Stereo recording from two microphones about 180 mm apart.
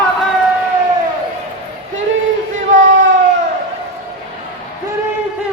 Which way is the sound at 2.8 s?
90° right.